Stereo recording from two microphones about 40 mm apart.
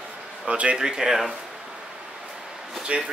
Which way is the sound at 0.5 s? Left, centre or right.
Right.